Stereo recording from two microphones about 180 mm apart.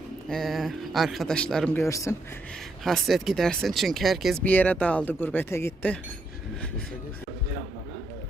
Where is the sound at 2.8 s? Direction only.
Centre (ahead or behind).